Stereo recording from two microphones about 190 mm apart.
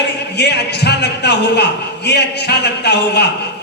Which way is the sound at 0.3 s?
60° left (ahead or behind).